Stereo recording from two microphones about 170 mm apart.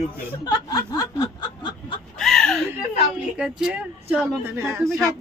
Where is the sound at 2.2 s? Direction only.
Centre (ahead or behind).